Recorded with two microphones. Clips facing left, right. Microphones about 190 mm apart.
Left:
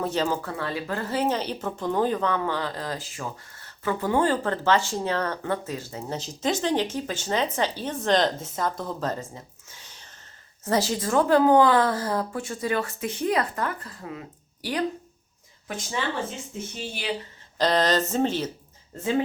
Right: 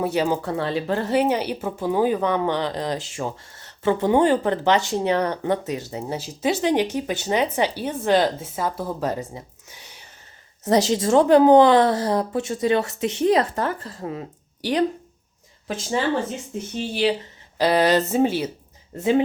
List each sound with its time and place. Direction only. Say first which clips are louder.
0.0 s a woman's voice: right 4 dB; 15° right (ahead or behind)
0.5 s a woman's voice: right 6 dB; 25° right (ahead or behind)
16.9 s speech: right 10 dB; 30° right (ahead or behind)
17.6 s a woman's voice: right 4 dB; 10° right (ahead or behind)